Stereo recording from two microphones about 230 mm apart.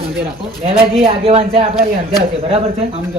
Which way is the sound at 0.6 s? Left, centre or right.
Right.